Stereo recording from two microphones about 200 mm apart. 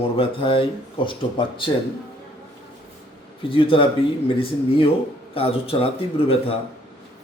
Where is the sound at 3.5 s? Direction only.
25° left (ahead or behind).